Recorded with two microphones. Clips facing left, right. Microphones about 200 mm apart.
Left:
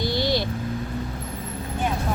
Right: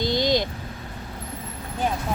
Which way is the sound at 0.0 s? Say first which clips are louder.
Right 2 dB; 20° right (ahead or behind).